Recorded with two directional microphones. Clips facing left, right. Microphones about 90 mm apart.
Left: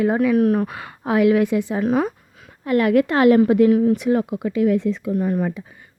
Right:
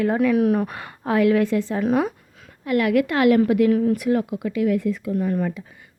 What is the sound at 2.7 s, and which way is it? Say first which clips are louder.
A woman's voice: left 3 dB; 35° left (ahead or behind).